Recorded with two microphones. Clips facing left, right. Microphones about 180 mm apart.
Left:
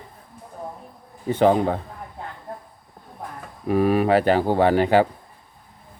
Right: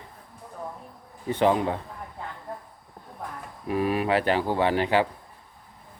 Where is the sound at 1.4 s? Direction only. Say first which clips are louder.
Left 4 dB; 40° left (ahead or behind).